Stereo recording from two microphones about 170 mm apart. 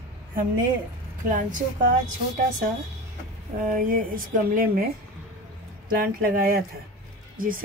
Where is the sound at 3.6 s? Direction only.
50° right (ahead or behind).